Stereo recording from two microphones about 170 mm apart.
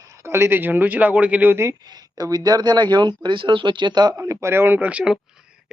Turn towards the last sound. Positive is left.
turn(degrees=-5)  # may be behind; listen again after turning